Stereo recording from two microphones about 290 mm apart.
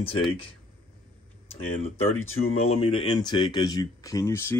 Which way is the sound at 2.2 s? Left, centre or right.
Left.